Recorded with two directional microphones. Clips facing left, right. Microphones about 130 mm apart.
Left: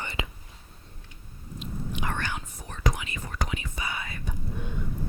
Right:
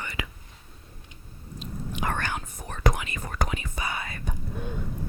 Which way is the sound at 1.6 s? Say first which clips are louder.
Right 1 dB; 45° right (ahead or behind).